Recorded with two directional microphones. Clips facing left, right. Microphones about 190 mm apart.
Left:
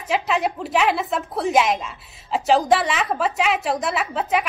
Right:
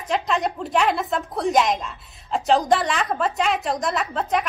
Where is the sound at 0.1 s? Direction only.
5° left (ahead or behind).